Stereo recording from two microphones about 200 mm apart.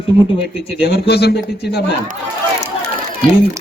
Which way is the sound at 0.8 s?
55° left (ahead or behind).